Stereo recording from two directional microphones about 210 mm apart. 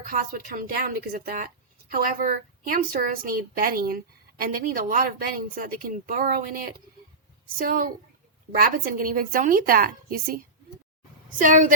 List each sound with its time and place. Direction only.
0.0 s a woman's voice: 40° right (ahead or behind)